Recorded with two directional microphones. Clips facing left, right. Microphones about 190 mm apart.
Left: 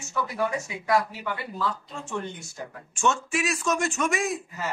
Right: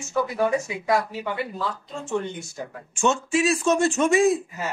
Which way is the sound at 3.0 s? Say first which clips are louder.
Right 4 dB; 25° right (ahead or behind).